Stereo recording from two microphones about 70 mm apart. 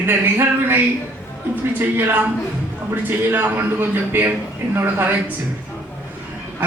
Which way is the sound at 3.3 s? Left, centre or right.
Right.